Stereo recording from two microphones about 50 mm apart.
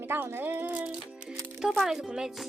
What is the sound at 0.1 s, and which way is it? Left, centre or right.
Speech, right.